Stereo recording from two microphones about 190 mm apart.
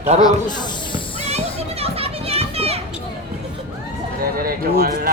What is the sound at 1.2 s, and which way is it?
Children playing, 35° right (ahead or behind).